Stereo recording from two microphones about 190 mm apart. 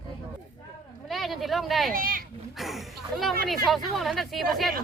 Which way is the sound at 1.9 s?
50° right (ahead or behind).